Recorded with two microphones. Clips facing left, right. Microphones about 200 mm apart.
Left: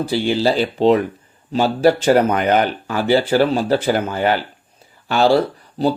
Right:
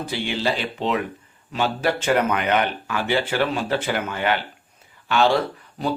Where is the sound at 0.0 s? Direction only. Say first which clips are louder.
Left 8 dB; 35° left (ahead or behind).